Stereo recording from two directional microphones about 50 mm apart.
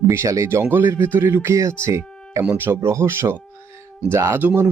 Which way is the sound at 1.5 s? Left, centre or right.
Right.